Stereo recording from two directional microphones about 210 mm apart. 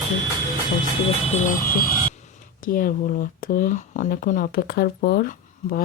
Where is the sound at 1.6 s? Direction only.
45° left (ahead or behind).